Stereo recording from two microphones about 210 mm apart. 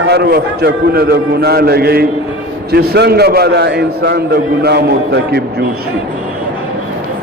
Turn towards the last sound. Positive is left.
turn(degrees=-50)  # may be behind; listen again after turning